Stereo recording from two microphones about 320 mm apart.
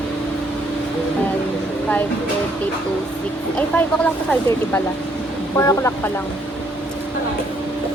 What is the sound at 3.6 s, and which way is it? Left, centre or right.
Speech, centre.